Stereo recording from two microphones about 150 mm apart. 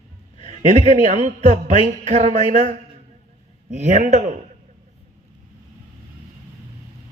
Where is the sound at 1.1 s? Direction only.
50° right (ahead or behind).